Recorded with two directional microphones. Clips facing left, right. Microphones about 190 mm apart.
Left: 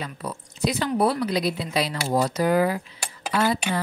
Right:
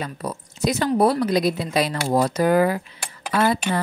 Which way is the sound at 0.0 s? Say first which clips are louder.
Right 3 dB; 45° right (ahead or behind).